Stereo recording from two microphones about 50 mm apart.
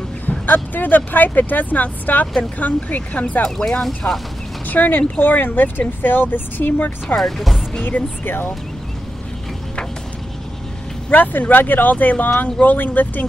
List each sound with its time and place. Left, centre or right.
0.3 s speech: left
3.4 s speech: centre
4.6 s speech: left
7.2 s speech: centre
7.8 s speech: left
11.1 s speech: left